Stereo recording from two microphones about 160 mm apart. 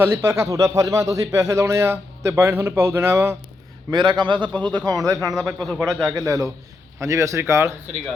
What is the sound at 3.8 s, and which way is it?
Speech, 25° right (ahead or behind).